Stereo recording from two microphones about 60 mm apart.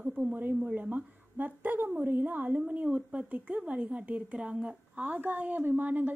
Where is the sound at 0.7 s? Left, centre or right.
Right.